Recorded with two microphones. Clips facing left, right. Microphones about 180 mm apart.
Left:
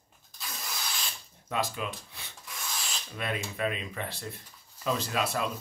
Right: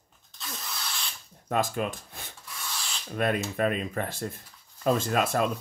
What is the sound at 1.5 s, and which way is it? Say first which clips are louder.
Speech: right 5 dB; 50° right (ahead or behind).